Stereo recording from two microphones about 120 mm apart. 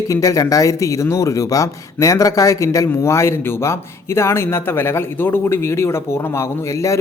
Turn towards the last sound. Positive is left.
turn(degrees=25)  # may be behind; listen again after turning